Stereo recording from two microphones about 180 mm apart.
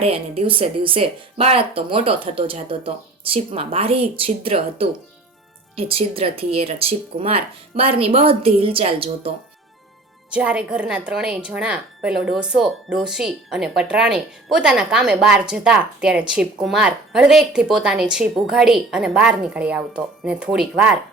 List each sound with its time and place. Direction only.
0.0 s speech: 30° right (ahead or behind)
10.3 s speech: 5° right (ahead or behind)